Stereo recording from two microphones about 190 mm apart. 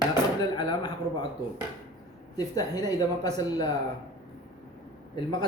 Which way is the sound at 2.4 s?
20° left (ahead or behind).